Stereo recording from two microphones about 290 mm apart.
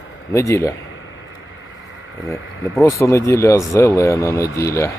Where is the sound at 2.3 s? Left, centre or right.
Centre.